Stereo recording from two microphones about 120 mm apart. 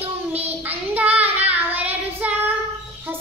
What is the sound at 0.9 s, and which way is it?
Child singing, 15° right (ahead or behind).